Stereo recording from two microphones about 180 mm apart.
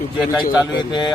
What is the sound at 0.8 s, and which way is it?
Speech, 25° left (ahead or behind).